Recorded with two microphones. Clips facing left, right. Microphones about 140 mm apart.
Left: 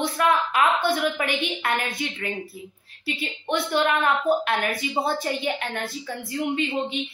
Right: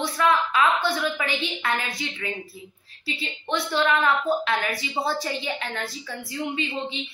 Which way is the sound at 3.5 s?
55° left (ahead or behind).